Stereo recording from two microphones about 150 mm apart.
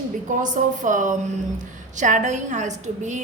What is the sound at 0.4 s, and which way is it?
A woman's voice, 55° right (ahead or behind).